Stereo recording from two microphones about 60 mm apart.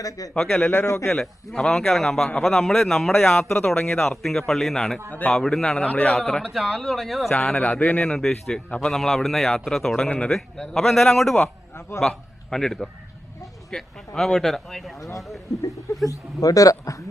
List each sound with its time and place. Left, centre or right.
0.3 s a man's voice: centre
6.4 s a man's voice: centre
7.3 s a man's voice: centre
7.6 s a man's voice: left
8.0 s a man's voice: centre
15.5 s speech: left